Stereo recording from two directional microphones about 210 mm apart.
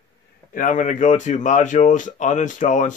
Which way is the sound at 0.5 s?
40° left (ahead or behind).